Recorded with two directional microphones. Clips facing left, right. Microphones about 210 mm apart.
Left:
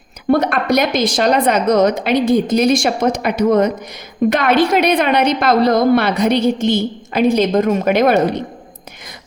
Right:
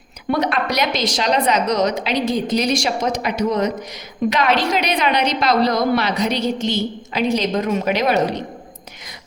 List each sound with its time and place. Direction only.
0.3 s a woman's voice: 50° left (ahead or behind)